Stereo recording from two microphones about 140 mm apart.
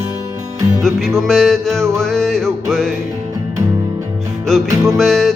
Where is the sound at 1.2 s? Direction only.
5° left (ahead or behind).